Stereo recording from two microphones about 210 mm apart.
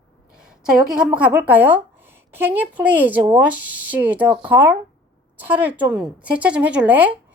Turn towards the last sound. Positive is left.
turn(degrees=-5)  # may be behind; listen again after turning